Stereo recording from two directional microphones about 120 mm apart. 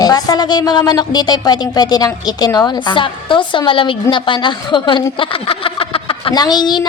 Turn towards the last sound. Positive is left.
turn(degrees=35)  # may be behind; listen again after turning